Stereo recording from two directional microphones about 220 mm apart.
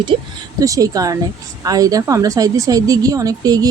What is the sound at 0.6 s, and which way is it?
Speech, 15° right (ahead or behind).